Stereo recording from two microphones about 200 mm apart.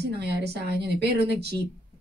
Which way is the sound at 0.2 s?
55° right (ahead or behind).